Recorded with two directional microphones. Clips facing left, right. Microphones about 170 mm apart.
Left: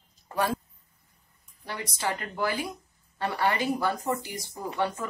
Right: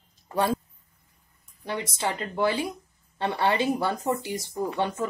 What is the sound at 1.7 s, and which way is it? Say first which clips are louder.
Speech: right 3 dB; 25° right (ahead or behind).